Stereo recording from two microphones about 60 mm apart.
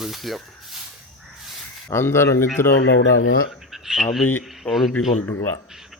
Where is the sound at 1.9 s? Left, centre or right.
Left.